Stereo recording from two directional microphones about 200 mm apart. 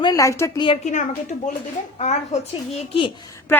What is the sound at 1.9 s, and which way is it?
A woman's voice, 35° left (ahead or behind).